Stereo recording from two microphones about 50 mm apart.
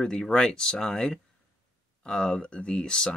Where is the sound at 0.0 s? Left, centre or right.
Centre.